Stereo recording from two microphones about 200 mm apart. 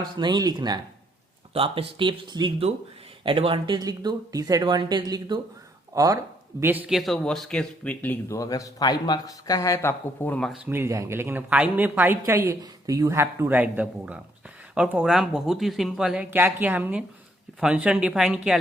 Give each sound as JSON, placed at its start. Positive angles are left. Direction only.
{"t": 0.2, "sound": "speech", "side_deg": -20}
{"t": 10.7, "sound": "a woman's voice", "side_deg": -15}